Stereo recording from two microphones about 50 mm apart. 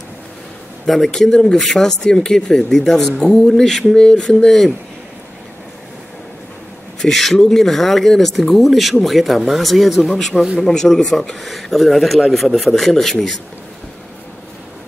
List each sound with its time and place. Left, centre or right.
0.8 s speech: centre
1.3 s speech: centre
7.0 s speech: centre